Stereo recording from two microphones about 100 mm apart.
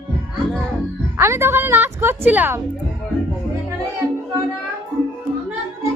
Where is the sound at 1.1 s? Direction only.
25° right (ahead or behind).